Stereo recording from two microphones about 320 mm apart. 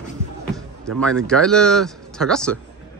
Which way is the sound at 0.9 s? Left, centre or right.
Centre.